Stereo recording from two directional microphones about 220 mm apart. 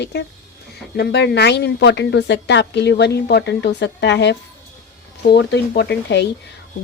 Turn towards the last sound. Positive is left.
turn(degrees=50)  # may be behind; listen again after turning